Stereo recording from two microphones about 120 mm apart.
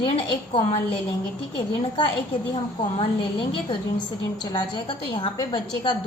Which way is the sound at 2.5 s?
40° left (ahead or behind).